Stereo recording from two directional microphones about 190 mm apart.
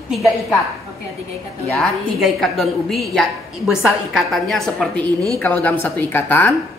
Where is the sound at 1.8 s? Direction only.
Centre (ahead or behind).